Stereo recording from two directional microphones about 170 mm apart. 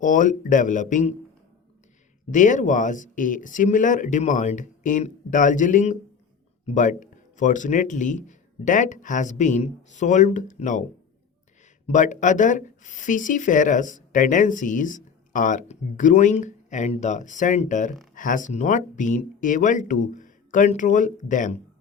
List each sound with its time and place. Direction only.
0.0 s speech: 50° left (ahead or behind)
2.3 s speech: 50° left (ahead or behind)
11.9 s speech: 45° left (ahead or behind)